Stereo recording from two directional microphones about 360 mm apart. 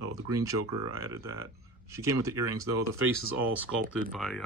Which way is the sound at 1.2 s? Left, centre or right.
Right.